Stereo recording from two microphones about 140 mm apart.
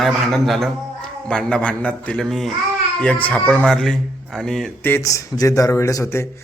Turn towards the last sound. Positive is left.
turn(degrees=20)  # may be behind; listen again after turning